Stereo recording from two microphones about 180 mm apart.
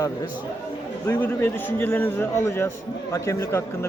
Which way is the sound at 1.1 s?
15° left (ahead or behind).